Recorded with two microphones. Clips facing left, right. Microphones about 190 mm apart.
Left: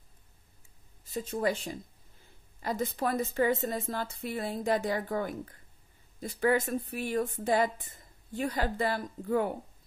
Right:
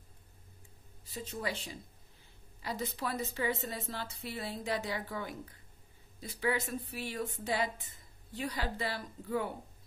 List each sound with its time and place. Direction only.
1.0 s a woman's voice: 50° left (ahead or behind)